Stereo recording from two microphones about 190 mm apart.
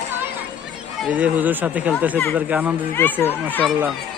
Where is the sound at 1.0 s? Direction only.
5° right (ahead or behind).